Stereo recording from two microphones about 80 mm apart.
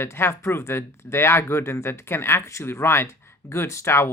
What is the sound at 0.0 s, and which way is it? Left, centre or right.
Speech, left.